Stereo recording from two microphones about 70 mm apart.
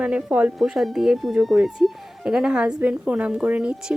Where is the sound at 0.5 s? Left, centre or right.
Centre.